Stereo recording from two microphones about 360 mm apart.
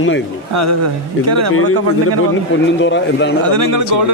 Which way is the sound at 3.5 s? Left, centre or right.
Right.